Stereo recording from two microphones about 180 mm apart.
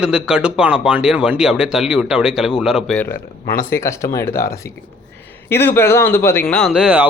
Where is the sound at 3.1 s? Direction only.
55° left (ahead or behind).